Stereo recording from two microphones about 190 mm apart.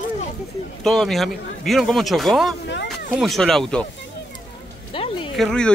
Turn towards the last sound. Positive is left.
turn(degrees=5)  # may be behind; listen again after turning